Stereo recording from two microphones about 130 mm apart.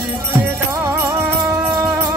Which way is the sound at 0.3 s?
20° right (ahead or behind).